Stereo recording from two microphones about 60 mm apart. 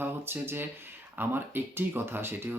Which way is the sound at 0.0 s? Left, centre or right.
Right.